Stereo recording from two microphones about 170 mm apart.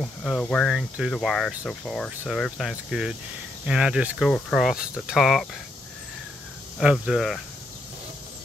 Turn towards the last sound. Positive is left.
turn(degrees=0)  # may be behind; listen again after turning